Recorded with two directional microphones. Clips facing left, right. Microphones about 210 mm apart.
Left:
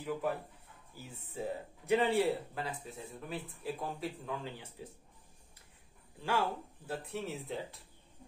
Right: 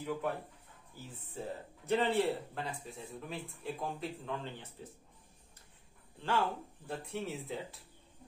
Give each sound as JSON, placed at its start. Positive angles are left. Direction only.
{"t": 0.0, "sound": "speech", "side_deg": 0}
{"t": 6.1, "sound": "speech", "side_deg": 10}